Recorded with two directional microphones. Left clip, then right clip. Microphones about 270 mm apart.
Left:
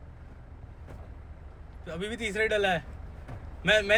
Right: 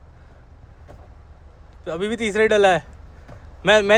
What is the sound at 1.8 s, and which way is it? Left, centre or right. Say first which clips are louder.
A man's voice: right 10 dB; centre.